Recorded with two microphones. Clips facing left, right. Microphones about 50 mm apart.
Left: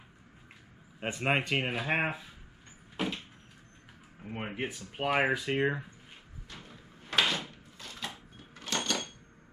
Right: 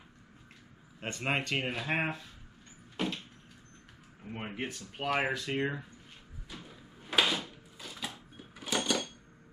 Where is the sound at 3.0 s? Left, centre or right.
Centre.